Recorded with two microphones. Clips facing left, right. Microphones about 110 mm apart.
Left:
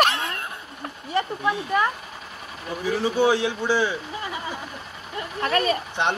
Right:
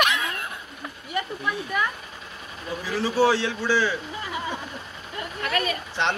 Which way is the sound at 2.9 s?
20° left (ahead or behind).